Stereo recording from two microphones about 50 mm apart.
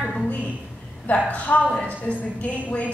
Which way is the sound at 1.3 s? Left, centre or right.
Left.